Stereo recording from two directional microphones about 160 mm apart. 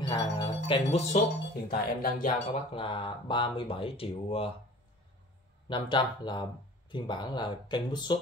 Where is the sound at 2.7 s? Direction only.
30° left (ahead or behind).